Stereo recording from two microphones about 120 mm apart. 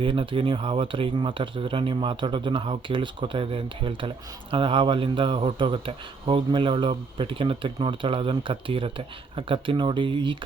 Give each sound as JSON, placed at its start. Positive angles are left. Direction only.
{"t": 0.0, "sound": "speech", "side_deg": -45}